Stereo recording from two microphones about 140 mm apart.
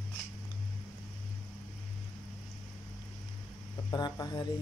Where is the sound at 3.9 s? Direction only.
30° left (ahead or behind).